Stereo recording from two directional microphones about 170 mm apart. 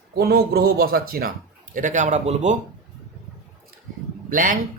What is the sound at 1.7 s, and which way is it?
Speech, 50° right (ahead or behind).